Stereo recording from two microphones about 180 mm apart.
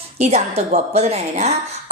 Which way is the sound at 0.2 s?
40° right (ahead or behind).